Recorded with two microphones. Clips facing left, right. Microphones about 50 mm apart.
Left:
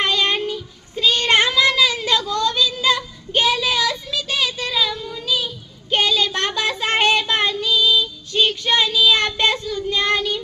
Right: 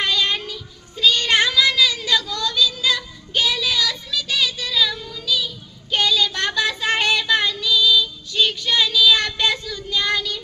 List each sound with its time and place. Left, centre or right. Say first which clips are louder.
0.0 s child singing: left 2 dB; left
1.9 s a sound: left 2 dB; left
2.6 s child singing: left 1 dB; left
7.7 s female singing: right 2 dB; left
9.1 s child singing: left 2 dB; left